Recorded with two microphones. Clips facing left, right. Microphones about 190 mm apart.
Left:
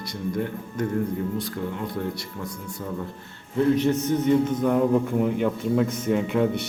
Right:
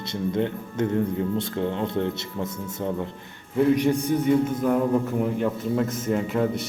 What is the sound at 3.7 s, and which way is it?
A man's voice, 15° right (ahead or behind).